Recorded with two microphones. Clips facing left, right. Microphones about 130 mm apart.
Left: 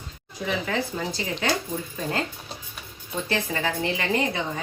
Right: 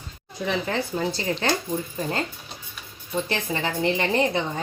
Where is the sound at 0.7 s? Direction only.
35° right (ahead or behind).